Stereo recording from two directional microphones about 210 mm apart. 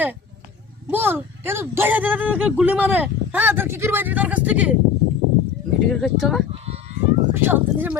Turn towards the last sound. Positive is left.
turn(degrees=-10)  # may be behind; listen again after turning